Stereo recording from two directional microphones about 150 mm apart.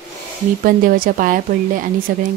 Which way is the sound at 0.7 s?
70° right (ahead or behind).